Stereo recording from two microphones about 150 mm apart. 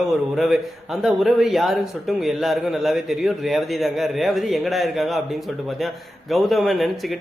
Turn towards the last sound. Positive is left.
turn(degrees=0)  # may be behind; listen again after turning